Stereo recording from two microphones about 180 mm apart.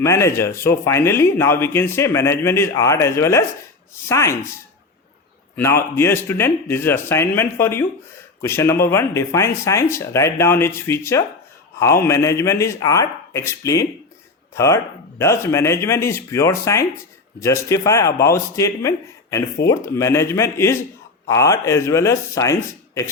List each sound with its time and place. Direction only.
0.0 s speech: 15° left (ahead or behind)